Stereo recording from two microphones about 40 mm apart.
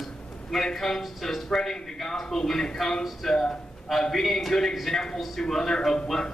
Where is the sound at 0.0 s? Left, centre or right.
Centre.